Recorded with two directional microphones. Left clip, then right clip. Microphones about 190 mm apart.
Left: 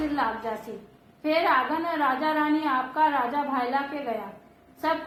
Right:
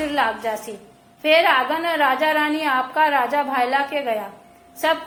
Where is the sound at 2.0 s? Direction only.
35° right (ahead or behind).